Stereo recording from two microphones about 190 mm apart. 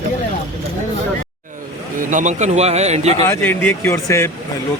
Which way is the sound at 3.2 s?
10° left (ahead or behind).